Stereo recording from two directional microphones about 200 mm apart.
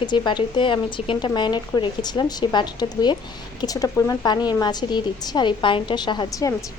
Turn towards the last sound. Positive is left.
turn(degrees=15)  # may be behind; listen again after turning